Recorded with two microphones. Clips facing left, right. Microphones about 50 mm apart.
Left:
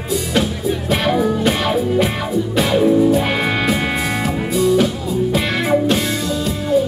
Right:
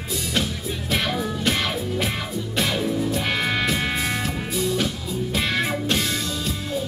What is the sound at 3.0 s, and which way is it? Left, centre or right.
Music, centre.